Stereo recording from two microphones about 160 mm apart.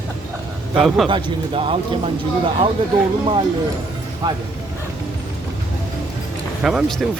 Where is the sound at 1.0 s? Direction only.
35° right (ahead or behind).